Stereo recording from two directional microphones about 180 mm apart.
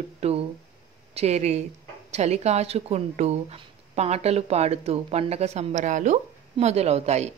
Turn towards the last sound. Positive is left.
turn(degrees=-40)  # may be behind; listen again after turning